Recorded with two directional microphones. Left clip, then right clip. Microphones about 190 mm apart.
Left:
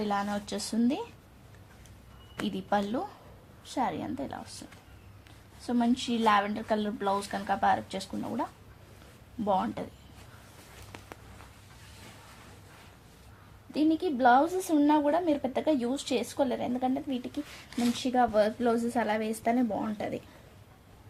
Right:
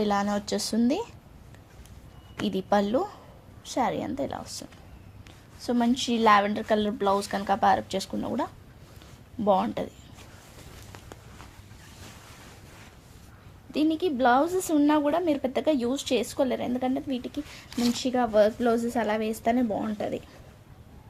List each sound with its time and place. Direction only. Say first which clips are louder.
0.0 s a woman's voice: right 5 dB; 45° right (ahead or behind)
2.5 s a woman's voice: right 6 dB; 45° right (ahead or behind)
5.5 s a woman's voice: right 3 dB; 50° right (ahead or behind)
13.7 s a woman's voice: right 2 dB; 30° right (ahead or behind)